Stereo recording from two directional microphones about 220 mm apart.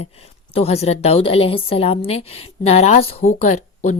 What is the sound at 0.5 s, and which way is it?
A woman's voice, 25° left (ahead or behind).